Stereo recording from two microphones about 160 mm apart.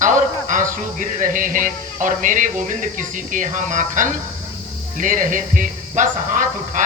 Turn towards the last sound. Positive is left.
turn(degrees=-55)  # may be behind; listen again after turning